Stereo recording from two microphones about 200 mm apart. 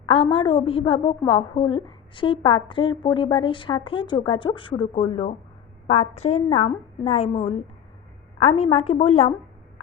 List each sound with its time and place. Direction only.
0.0 s a woman's voice: 25° left (ahead or behind)